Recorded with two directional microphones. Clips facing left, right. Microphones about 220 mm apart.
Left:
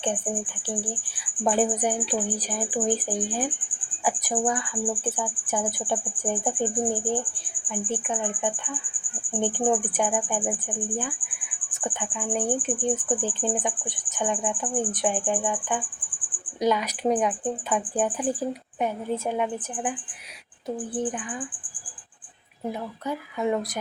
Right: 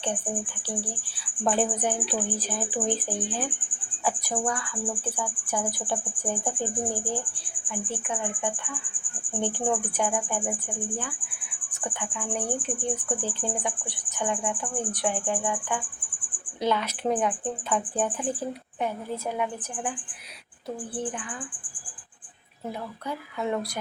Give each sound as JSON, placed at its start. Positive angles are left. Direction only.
{"t": 1.1, "sound": "speech", "side_deg": 15}
{"t": 4.0, "sound": "speech", "side_deg": 15}
{"t": 7.7, "sound": "speech", "side_deg": 20}
{"t": 11.8, "sound": "speech", "side_deg": 20}
{"t": 23.0, "sound": "speech", "side_deg": 15}